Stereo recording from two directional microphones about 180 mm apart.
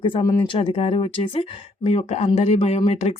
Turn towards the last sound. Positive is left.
turn(degrees=35)  # may be behind; listen again after turning